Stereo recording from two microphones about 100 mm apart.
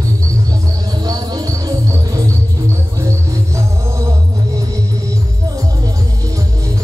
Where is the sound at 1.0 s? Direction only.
40° right (ahead or behind).